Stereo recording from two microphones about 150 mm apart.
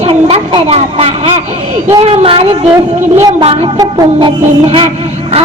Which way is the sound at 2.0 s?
40° right (ahead or behind).